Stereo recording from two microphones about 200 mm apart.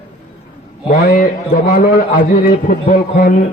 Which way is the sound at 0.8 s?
45° left (ahead or behind).